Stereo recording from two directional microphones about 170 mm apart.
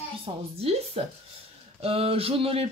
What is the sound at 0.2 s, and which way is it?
Speech, 35° right (ahead or behind).